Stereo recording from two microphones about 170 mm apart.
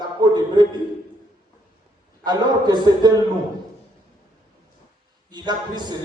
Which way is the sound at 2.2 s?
25° right (ahead or behind).